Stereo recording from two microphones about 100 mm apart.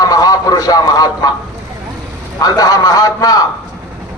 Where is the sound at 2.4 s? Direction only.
40° left (ahead or behind).